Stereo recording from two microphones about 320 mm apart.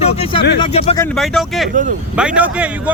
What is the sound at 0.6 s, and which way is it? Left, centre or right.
Speech, centre.